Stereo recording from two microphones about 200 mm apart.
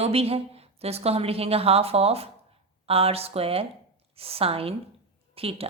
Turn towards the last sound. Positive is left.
turn(degrees=-30)  # may be behind; listen again after turning